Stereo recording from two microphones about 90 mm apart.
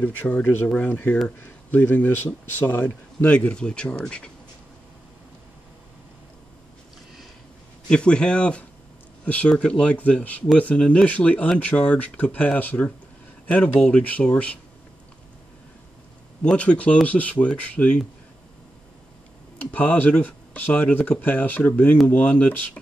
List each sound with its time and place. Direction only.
0.0 s speech: 20° left (ahead or behind)
7.9 s speech: 10° left (ahead or behind)
16.4 s speech: 15° left (ahead or behind)
19.6 s speech: 20° left (ahead or behind)